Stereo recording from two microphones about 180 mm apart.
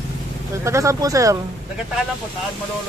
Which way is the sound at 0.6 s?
15° right (ahead or behind).